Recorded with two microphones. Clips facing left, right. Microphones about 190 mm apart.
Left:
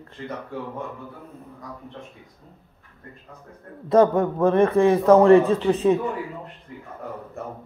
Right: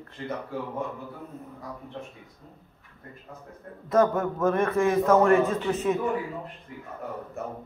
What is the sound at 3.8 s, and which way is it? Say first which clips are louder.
A man's voice: left 5 dB; 30° left (ahead or behind).